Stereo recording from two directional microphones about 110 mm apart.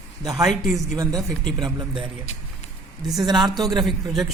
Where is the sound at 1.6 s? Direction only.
50° right (ahead or behind).